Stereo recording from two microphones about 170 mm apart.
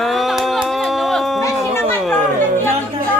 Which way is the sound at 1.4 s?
15° left (ahead or behind).